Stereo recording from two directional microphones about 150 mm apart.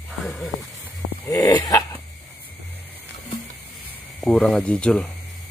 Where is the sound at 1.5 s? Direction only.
25° left (ahead or behind).